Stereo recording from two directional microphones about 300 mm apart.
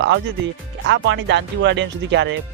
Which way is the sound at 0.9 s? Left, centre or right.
Right.